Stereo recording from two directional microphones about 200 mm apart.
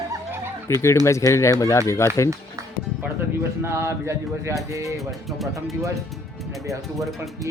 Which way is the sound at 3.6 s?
15° right (ahead or behind).